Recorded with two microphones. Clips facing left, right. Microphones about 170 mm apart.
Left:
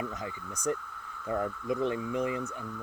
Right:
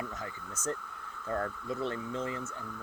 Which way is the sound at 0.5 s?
15° left (ahead or behind).